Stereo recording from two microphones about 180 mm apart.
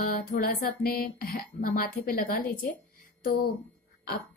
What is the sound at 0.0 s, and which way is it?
A woman's voice, 50° left (ahead or behind).